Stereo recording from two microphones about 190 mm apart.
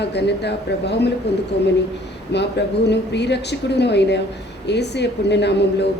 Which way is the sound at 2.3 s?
65° left (ahead or behind).